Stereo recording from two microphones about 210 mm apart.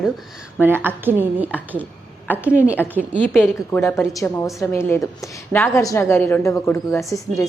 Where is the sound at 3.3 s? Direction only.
5° left (ahead or behind).